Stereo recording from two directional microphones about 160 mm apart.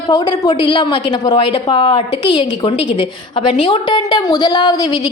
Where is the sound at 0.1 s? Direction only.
25° left (ahead or behind).